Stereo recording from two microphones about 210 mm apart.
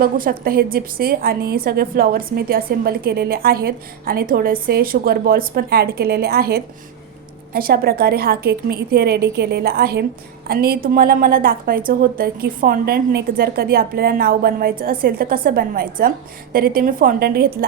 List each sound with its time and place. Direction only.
0.0 s a woman's voice: 45° right (ahead or behind)